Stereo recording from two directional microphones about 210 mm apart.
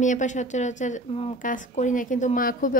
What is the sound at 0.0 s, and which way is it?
Speech, 35° left (ahead or behind).